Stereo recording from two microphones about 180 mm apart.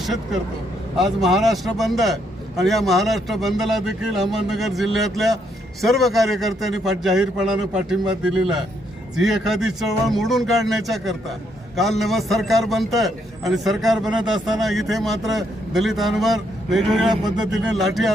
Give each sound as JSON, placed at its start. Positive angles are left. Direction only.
{"t": 0.0, "sound": "a man's voice", "side_deg": 0}
{"t": 17.1, "sound": "speech", "side_deg": -20}
{"t": 17.5, "sound": "a man's voice", "side_deg": -5}